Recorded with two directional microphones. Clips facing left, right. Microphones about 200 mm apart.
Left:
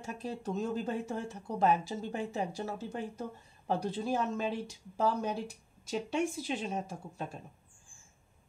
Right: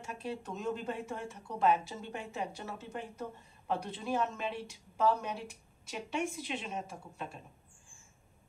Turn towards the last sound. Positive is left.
turn(degrees=40)  # may be behind; listen again after turning